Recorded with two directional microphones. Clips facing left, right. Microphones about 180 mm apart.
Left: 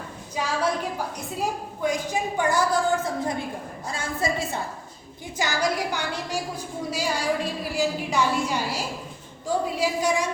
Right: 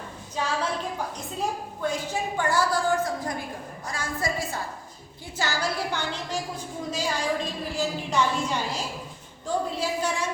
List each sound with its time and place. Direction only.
0.3 s a woman's voice: 10° left (ahead or behind)